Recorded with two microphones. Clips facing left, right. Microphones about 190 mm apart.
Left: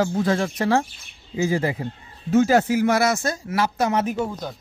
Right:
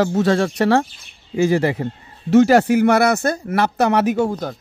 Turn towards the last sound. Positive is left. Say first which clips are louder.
# right 6 dB
turn(degrees=-80)